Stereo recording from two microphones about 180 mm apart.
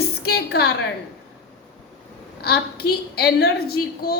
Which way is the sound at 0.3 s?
65° left (ahead or behind).